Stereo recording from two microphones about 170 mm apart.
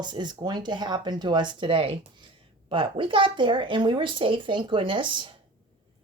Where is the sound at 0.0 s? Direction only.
25° right (ahead or behind).